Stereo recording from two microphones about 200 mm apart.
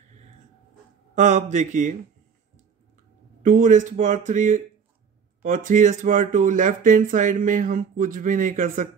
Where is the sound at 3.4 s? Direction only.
40° right (ahead or behind).